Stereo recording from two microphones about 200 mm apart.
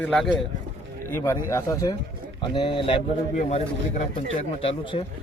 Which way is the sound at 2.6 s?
25° left (ahead or behind).